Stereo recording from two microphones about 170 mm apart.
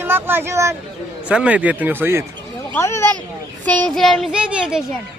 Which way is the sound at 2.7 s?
15° left (ahead or behind).